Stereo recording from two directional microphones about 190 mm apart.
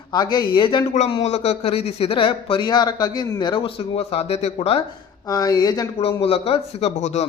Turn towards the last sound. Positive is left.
turn(degrees=35)  # may be behind; listen again after turning